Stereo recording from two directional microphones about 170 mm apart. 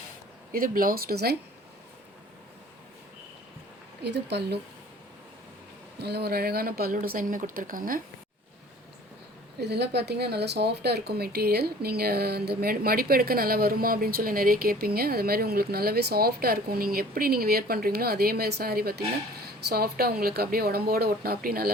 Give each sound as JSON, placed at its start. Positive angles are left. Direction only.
{"t": 0.5, "sound": "speech", "side_deg": -55}
{"t": 4.0, "sound": "speech", "side_deg": -80}
{"t": 6.0, "sound": "speech", "side_deg": -70}
{"t": 9.6, "sound": "speech", "side_deg": -75}